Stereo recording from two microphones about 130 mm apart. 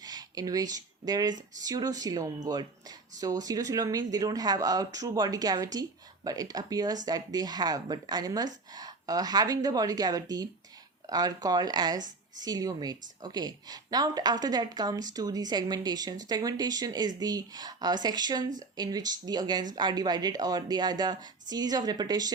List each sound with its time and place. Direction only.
0.0 s speech: 30° right (ahead or behind)